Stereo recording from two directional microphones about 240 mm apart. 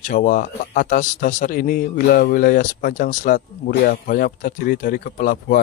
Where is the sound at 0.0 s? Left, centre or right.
Left.